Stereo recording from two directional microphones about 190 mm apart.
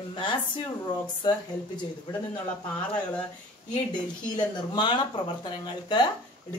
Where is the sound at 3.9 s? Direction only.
25° left (ahead or behind).